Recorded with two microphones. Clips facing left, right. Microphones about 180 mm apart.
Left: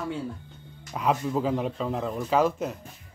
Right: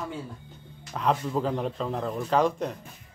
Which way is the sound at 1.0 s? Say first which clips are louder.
Left 1 dB; 5° left (ahead or behind).